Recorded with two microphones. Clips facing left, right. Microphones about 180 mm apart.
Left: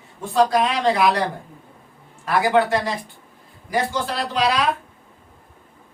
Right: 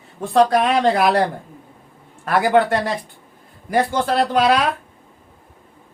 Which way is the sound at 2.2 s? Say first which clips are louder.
Right 2 dB; 50° right (ahead or behind).